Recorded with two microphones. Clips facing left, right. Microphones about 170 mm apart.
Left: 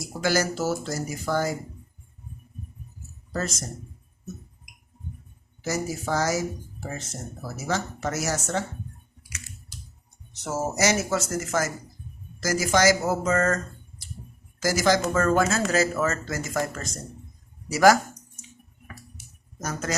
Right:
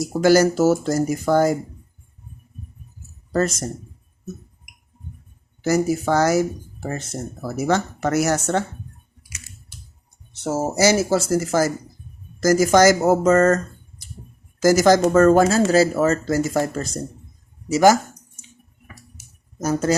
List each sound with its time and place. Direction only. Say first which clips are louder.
0.2 s speech: right 10 dB; 45° right (ahead or behind)
5.6 s speech: right 9 dB; 65° right (ahead or behind)
7.5 s speech: right 8 dB; 65° right (ahead or behind)
10.4 s speech: right 6 dB; 30° right (ahead or behind)
14.6 s speech: right 8 dB; 45° right (ahead or behind)
17.7 s a sound: right 3 dB; 20° right (ahead or behind)
19.5 s speech: right 10 dB; 30° right (ahead or behind)